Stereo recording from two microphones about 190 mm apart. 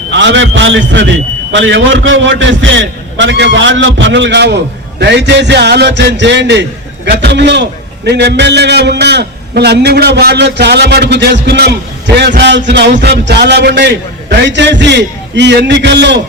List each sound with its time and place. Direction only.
0.1 s a man's voice: 70° right (ahead or behind)